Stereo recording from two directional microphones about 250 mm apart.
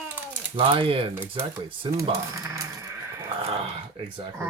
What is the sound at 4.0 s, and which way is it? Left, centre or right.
Speech, centre.